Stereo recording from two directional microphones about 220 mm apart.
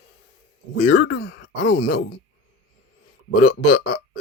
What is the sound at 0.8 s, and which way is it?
Speech, 45° left (ahead or behind).